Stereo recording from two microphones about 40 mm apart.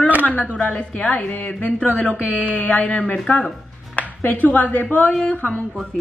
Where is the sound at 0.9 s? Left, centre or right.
Left.